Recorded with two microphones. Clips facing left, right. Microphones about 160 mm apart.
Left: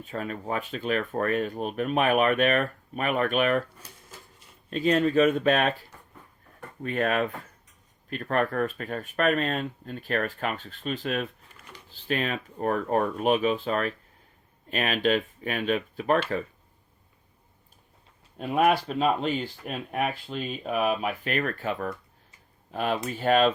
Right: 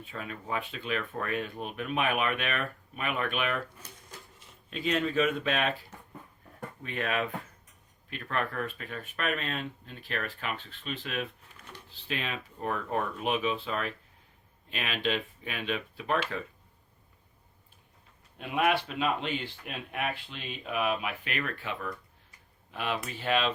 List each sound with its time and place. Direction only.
0.0 s speech: 45° left (ahead or behind)
3.8 s a sound: 10° left (ahead or behind)
4.7 s speech: 40° left (ahead or behind)
6.8 s speech: 45° left (ahead or behind)
11.5 s a sound: 10° left (ahead or behind)
12.0 s speech: 45° left (ahead or behind)
18.3 s speech: 40° left (ahead or behind)